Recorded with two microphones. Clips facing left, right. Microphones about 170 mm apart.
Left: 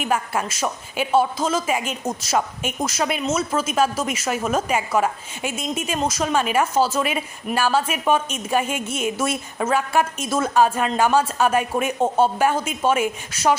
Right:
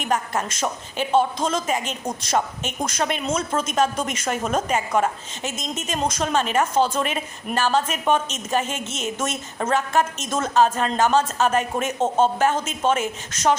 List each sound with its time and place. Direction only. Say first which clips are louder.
0.0 s a woman's voice: left 1 dB; 10° left (ahead or behind)